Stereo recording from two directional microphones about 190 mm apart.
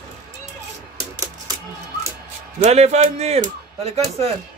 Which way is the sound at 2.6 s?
35° right (ahead or behind).